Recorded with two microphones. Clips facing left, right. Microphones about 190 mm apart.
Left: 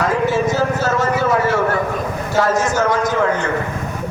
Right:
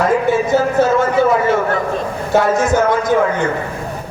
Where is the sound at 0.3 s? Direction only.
55° right (ahead or behind).